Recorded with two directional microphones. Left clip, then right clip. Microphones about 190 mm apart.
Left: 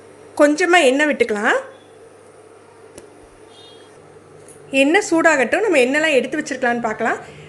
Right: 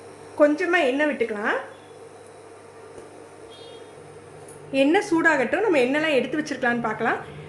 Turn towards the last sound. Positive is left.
turn(degrees=25)  # may be behind; listen again after turning